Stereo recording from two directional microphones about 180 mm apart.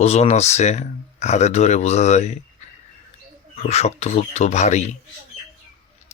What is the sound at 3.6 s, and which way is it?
Speech, 35° left (ahead or behind).